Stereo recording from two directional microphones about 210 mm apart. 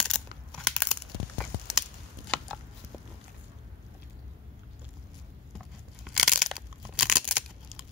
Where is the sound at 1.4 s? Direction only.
Centre (ahead or behind).